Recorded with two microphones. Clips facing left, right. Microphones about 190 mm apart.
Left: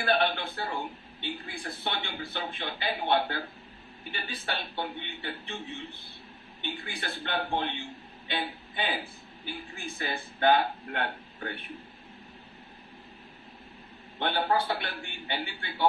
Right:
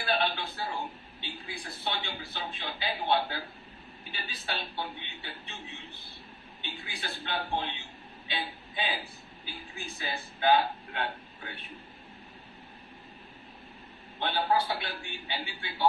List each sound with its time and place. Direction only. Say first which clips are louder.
0.0 s a sound: left 3 dB; 55° left (ahead or behind)
1.2 s a man's voice: left 5 dB; 55° left (ahead or behind)
14.2 s a man's voice: left 1 dB; 55° left (ahead or behind)